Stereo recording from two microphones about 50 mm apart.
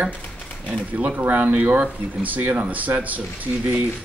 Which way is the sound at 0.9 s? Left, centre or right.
Right.